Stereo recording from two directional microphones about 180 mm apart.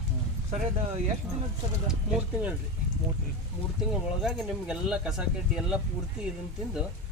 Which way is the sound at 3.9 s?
5° right (ahead or behind).